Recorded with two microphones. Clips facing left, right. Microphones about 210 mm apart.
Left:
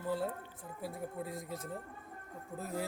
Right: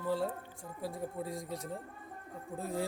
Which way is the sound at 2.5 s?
30° right (ahead or behind).